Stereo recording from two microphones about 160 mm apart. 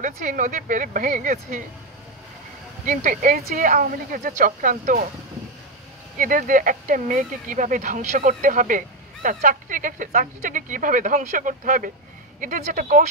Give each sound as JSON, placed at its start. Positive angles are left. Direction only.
{"t": 0.0, "sound": "speech", "side_deg": -55}
{"t": 2.8, "sound": "speech", "side_deg": -55}
{"t": 6.1, "sound": "speech", "side_deg": -60}